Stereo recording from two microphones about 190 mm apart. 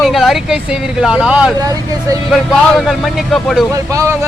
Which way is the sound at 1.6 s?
20° right (ahead or behind).